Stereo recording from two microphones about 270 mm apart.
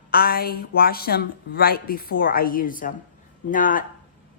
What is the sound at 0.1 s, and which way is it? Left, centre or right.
A woman's voice, left.